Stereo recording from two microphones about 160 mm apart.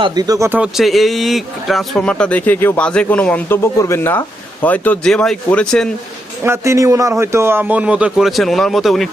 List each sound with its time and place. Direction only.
0.0 s speech: 25° right (ahead or behind)
0.6 s speech: centre (ahead or behind)
6.4 s a man's voice: 15° right (ahead or behind); by 9.0 s centre (ahead or behind)